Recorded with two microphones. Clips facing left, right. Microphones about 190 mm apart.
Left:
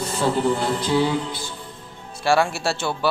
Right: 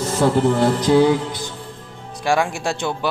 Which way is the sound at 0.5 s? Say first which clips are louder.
Right 6 dB; 75° right (ahead or behind).